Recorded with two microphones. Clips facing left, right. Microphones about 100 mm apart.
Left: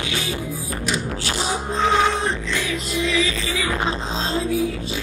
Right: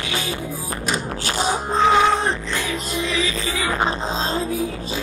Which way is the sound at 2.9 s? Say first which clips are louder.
Left 3 dB; 40° right (ahead or behind).